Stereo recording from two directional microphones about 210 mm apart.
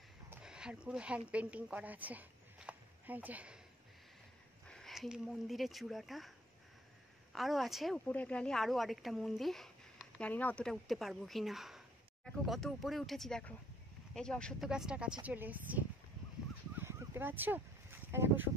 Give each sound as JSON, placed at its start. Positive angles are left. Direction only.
{"t": 0.3, "sound": "a woman's voice", "side_deg": -5}
{"t": 4.6, "sound": "speech", "side_deg": 0}
{"t": 7.3, "sound": "a woman's voice", "side_deg": 0}
{"t": 16.7, "sound": "a sound", "side_deg": -10}